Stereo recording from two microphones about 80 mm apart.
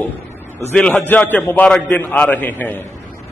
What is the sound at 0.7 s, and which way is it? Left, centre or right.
A man's voice, centre.